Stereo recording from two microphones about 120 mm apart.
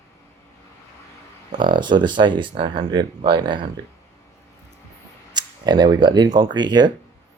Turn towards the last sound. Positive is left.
turn(degrees=-35)  # may be behind; listen again after turning